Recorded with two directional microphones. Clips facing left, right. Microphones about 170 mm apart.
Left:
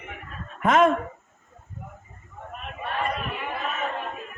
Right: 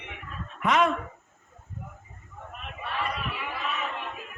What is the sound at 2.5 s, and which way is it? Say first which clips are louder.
Chatter: left 4 dB; 45° left (ahead or behind).